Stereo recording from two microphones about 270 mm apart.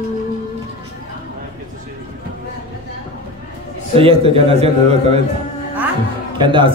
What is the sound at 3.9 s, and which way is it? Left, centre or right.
Speech, centre.